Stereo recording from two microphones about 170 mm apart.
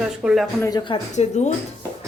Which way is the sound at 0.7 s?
25° left (ahead or behind).